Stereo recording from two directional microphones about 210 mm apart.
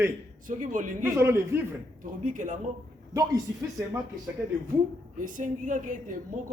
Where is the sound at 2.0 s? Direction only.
40° right (ahead or behind).